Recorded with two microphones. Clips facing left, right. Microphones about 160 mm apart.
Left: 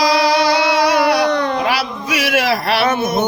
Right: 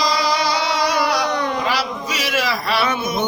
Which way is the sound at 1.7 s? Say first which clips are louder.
Left 3 dB; 60° left (ahead or behind).